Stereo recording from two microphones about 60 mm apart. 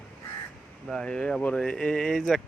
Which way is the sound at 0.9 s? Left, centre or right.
Centre.